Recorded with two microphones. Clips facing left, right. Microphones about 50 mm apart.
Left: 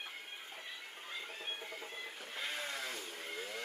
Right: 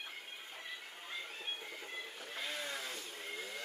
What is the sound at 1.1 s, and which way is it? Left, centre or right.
Music, left.